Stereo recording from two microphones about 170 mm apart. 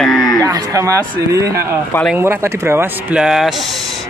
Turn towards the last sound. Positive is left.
turn(degrees=0)  # may be behind; listen again after turning